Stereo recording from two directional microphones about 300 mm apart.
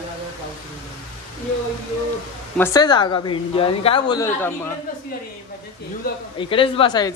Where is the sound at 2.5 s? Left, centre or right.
Centre.